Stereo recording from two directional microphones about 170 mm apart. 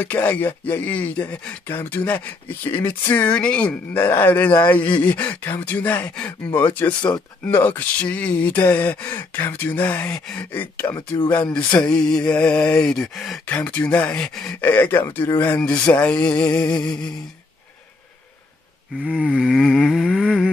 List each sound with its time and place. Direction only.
0.0 s speech: 10° left (ahead or behind)
16.7 s music: 25° left (ahead or behind)
19.0 s vehicle: centre (ahead or behind)